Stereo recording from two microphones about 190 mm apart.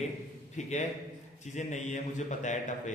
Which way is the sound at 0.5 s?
40° left (ahead or behind).